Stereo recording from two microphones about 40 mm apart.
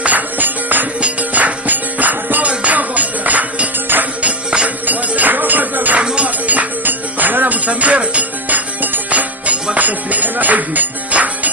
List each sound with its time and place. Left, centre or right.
0.1 s music: right
2.5 s music: right
2.7 s music: right
4.9 s music: right
6.0 s music: right
6.2 s music: right
9.0 s music: right